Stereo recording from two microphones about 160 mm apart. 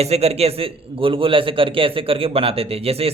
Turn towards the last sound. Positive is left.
turn(degrees=-40)  # may be behind; listen again after turning